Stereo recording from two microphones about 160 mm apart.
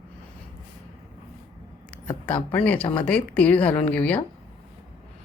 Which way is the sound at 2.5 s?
10° left (ahead or behind).